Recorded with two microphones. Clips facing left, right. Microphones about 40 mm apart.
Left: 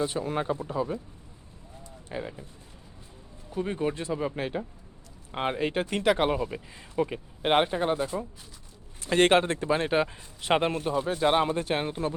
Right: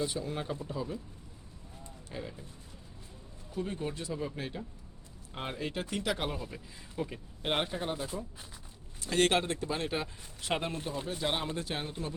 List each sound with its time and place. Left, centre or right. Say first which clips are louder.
0.0 s speech: left 6 dB; left
2.0 s speech: left 7 dB; left
3.5 s speech: left 7 dB; left